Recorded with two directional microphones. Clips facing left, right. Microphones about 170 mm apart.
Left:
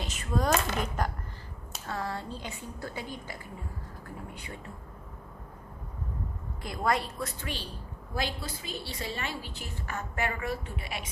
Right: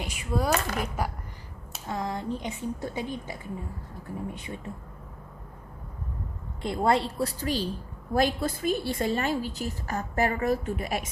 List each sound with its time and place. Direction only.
0.0 s a woman's voice: 10° right (ahead or behind)
4.4 s a woman's voice: 20° right (ahead or behind)
6.6 s a woman's voice: 25° right (ahead or behind)
8.1 s a woman's voice: 50° right (ahead or behind)